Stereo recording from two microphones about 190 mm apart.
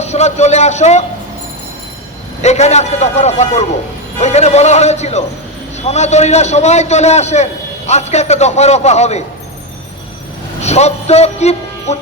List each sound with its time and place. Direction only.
0.0 s a man's voice: 35° left (ahead or behind)
2.4 s a man's voice: 35° left (ahead or behind)
10.6 s speech: 35° left (ahead or behind)